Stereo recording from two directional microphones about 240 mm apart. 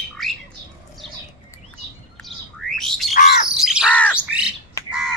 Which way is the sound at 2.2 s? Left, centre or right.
Centre.